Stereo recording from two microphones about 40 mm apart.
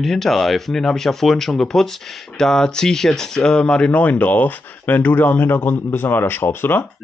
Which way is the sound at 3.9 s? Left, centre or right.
Left.